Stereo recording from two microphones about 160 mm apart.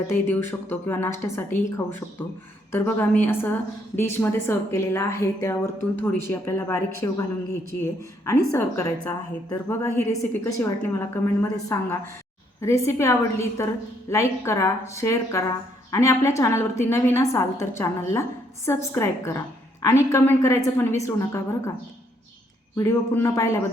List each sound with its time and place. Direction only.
0.1 s a woman's voice: 15° left (ahead or behind)
22.8 s a woman's voice: 15° left (ahead or behind)